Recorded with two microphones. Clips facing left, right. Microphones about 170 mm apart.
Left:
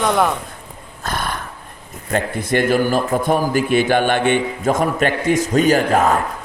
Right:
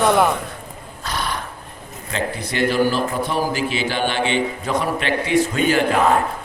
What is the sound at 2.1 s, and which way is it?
A man's voice, 50° left (ahead or behind).